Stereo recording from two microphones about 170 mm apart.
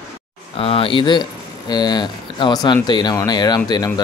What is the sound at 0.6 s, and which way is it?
Speech, 35° left (ahead or behind).